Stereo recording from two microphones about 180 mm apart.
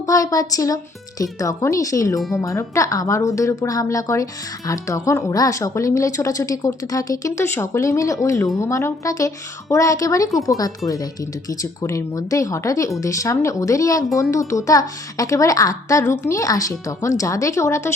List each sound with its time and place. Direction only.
0.0 s speech: 20° left (ahead or behind)